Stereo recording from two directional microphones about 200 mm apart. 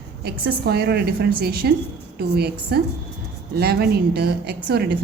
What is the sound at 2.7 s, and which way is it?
A woman's voice, 55° right (ahead or behind).